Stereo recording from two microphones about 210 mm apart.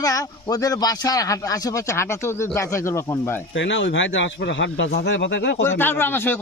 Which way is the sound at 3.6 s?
60° left (ahead or behind).